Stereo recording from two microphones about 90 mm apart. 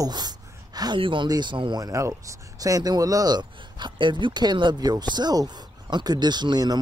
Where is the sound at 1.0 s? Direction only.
70° right (ahead or behind).